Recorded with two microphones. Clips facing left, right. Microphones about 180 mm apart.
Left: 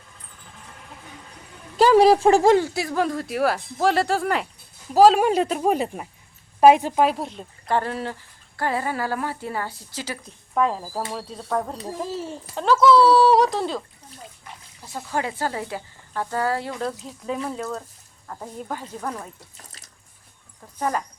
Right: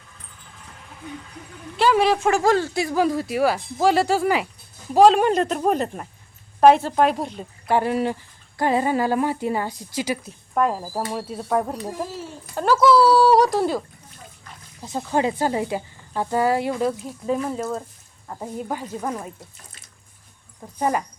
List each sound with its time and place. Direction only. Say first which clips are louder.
1.7 s speech: left 4 dB; 40° left (ahead or behind)
2.7 s speech: right 3 dB; centre (ahead or behind)
7.8 s speech: right 5 dB; 15° right (ahead or behind)
14.8 s speech: right 5 dB; 20° right (ahead or behind)
20.7 s speech: right 3 dB; 15° right (ahead or behind)